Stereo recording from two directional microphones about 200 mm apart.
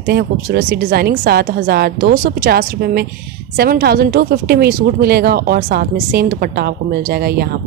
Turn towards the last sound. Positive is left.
turn(degrees=-50)  # may be behind; listen again after turning